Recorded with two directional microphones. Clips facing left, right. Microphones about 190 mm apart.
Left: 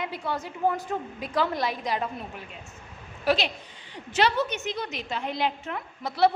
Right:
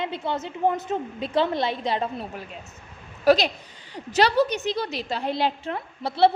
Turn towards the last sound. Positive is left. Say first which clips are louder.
# right 3 dB
turn(degrees=-30)  # may be behind; listen again after turning